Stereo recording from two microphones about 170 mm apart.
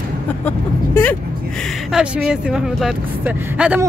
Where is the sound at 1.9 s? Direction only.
5° right (ahead or behind).